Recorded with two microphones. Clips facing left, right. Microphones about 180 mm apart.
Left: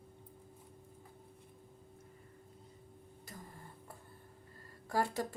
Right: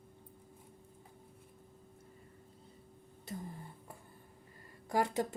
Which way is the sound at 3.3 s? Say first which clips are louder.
Right 9 dB; 25° right (ahead or behind).